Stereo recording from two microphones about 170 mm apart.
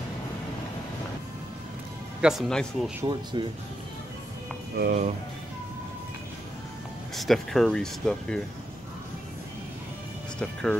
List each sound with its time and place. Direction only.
2.2 s speech: centre (ahead or behind)
3.0 s speech: 25° right (ahead or behind)
4.7 s speech: 60° right (ahead or behind)
7.2 s speech: centre (ahead or behind)
10.4 s speech: 5° left (ahead or behind)